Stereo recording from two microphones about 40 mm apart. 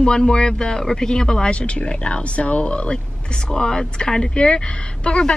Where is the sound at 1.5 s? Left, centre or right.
Left.